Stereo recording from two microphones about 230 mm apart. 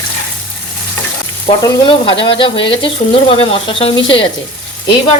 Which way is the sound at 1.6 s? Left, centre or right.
Centre.